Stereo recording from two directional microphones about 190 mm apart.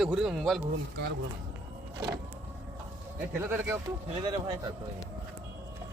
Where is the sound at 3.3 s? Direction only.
10° right (ahead or behind).